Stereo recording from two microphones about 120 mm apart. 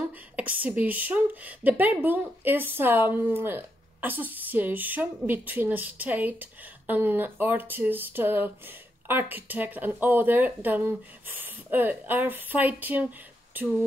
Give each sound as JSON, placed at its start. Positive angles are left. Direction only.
{"t": 0.4, "sound": "a woman's voice", "side_deg": -15}